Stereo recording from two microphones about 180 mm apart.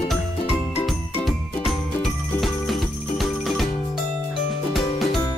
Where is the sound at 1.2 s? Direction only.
Centre (ahead or behind).